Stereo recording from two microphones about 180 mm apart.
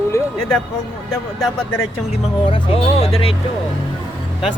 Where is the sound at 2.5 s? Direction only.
30° left (ahead or behind).